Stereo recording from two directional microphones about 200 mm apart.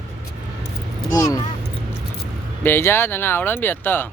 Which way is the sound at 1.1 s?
20° left (ahead or behind).